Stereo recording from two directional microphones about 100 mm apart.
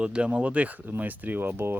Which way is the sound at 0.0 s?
10° right (ahead or behind).